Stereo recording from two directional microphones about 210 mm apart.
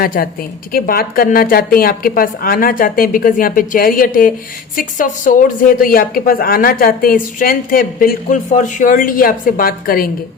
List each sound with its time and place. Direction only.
0.0 s speech: 45° left (ahead or behind)